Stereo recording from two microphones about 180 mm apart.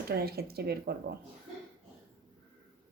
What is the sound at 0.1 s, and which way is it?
Speech, 60° right (ahead or behind).